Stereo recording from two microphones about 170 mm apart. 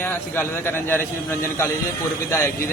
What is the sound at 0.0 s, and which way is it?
A man's voice, 15° left (ahead or behind).